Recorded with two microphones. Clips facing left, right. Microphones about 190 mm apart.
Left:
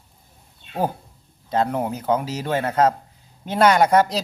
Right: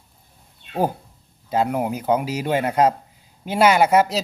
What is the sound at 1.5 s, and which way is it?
Speech, 10° right (ahead or behind).